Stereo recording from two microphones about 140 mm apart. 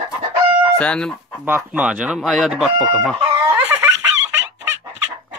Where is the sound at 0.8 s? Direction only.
5° left (ahead or behind).